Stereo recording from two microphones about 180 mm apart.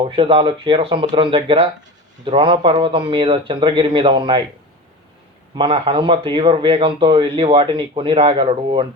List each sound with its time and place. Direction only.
0.0 s speech: 30° right (ahead or behind)
5.5 s speech: 30° right (ahead or behind)